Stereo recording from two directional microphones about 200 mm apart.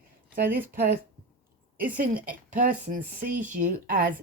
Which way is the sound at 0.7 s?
55° right (ahead or behind).